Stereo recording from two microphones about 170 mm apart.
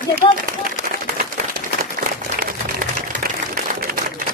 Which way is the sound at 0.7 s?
60° right (ahead or behind).